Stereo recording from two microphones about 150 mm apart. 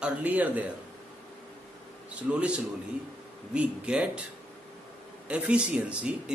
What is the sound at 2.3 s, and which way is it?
Speech, 10° right (ahead or behind).